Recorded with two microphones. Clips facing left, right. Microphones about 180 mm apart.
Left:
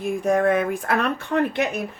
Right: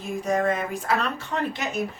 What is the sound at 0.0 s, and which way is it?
Speech, 55° left (ahead or behind).